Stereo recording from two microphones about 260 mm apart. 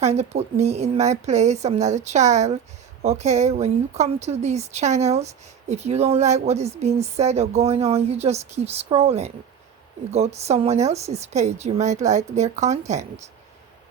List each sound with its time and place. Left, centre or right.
0.0 s a woman's voice: right